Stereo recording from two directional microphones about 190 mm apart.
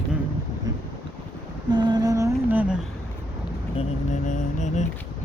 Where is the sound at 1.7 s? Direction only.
25° right (ahead or behind).